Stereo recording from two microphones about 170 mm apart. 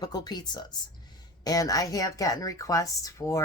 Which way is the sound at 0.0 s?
25° left (ahead or behind).